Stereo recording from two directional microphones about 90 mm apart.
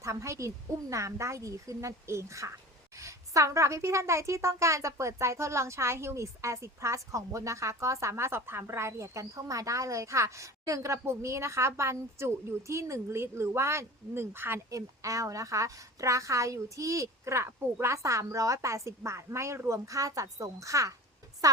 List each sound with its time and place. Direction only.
0.0 s a woman's voice: 35° right (ahead or behind)
14.7 s a woman's voice: 40° right (ahead or behind)